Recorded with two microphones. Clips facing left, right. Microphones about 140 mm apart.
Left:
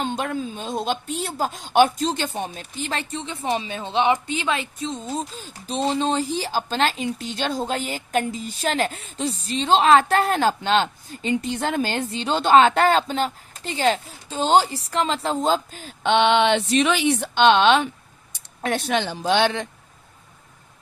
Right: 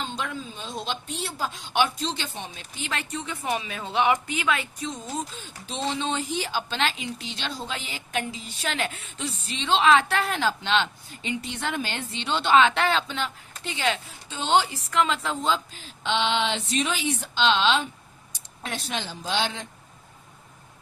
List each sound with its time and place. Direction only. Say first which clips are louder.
0.0 s a woman's voice: left 7 dB; 50° left (ahead or behind)